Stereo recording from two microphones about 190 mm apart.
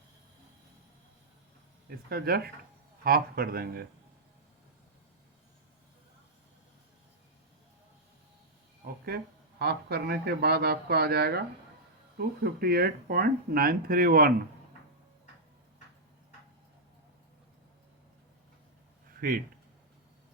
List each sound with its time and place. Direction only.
2.0 s speech: 55° right (ahead or behind)
9.0 s speech: 55° right (ahead or behind)
19.2 s speech: 45° right (ahead or behind)